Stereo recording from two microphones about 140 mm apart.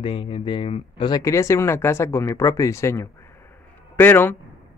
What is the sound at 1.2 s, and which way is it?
Speech, 20° left (ahead or behind).